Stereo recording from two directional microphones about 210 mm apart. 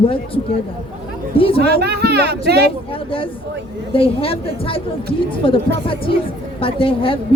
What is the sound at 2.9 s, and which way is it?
A woman's voice, 25° left (ahead or behind).